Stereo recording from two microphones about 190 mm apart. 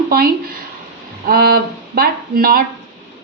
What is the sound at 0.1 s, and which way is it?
A woman's voice, 50° right (ahead or behind).